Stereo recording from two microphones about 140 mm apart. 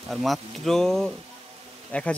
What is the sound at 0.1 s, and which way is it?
Speech, centre (ahead or behind).